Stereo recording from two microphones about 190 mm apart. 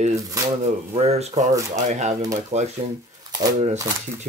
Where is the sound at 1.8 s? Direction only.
35° right (ahead or behind).